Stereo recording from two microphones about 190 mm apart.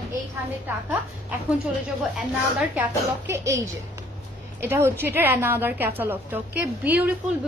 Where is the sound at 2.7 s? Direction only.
10° right (ahead or behind).